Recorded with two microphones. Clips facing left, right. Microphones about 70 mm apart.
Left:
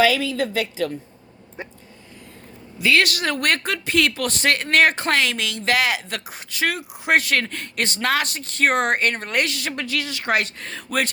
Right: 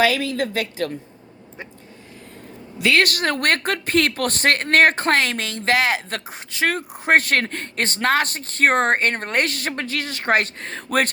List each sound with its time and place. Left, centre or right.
0.0 s speech: right
2.9 s speech: right
6.7 s speech: right